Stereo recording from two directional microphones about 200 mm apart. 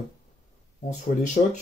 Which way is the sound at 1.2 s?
35° left (ahead or behind).